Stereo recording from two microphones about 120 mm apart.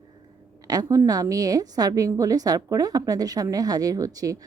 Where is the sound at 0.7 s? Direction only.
30° right (ahead or behind).